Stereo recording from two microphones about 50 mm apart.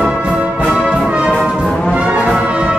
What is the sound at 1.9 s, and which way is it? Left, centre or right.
Brass instrument, right.